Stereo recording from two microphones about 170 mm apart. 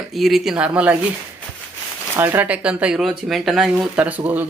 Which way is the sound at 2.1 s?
10° right (ahead or behind).